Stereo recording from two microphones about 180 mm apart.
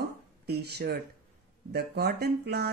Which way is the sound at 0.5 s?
65° right (ahead or behind).